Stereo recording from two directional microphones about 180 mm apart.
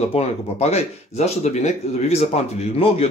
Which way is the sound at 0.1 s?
35° left (ahead or behind).